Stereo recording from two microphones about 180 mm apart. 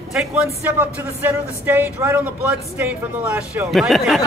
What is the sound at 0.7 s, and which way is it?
A man's voice, 10° right (ahead or behind).